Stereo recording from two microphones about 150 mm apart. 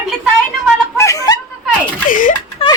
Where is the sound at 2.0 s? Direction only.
65° left (ahead or behind).